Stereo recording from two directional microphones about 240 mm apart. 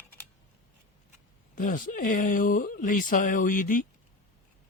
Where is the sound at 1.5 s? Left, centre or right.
Left.